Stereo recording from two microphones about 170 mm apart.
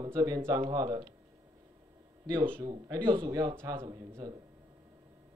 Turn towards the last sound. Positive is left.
turn(degrees=-20)  # may be behind; listen again after turning